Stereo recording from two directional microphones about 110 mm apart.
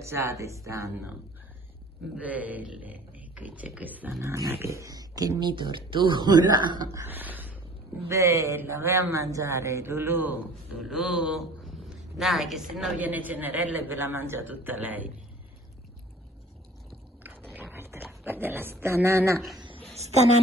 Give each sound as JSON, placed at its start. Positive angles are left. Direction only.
{"t": 0.0, "sound": "a man's voice", "side_deg": -25}
{"t": 2.2, "sound": "a man's voice", "side_deg": -15}
{"t": 4.2, "sound": "speech", "side_deg": -25}
{"t": 7.1, "sound": "a sound", "side_deg": -15}
{"t": 8.1, "sound": "a man's voice", "side_deg": -30}
{"t": 10.8, "sound": "speech", "side_deg": -5}
{"t": 13.0, "sound": "a man's voice", "side_deg": -15}
{"t": 17.2, "sound": "biting", "side_deg": -15}
{"t": 17.5, "sound": "a sound", "side_deg": -15}